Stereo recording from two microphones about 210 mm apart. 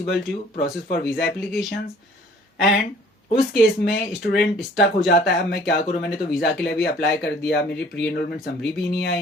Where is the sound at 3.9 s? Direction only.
50° left (ahead or behind).